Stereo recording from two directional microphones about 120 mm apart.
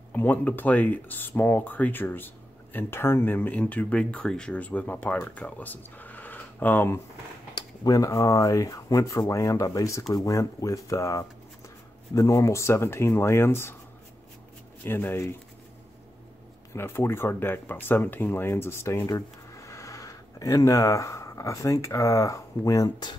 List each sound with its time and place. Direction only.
0.1 s speech: 15° left (ahead or behind)
7.5 s speech: 30° left (ahead or behind)
14.8 s speech: 15° left (ahead or behind)
16.7 s speech: 20° left (ahead or behind); by 23.1 s 35° left (ahead or behind)